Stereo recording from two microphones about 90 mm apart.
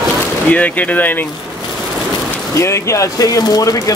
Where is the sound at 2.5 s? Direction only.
30° left (ahead or behind).